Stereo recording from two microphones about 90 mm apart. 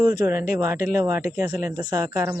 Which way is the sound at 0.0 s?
40° right (ahead or behind).